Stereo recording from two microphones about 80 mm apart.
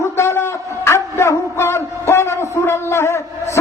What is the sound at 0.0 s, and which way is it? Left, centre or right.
A man's voice, left.